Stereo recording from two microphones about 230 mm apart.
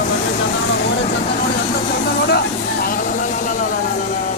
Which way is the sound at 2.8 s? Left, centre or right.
Left.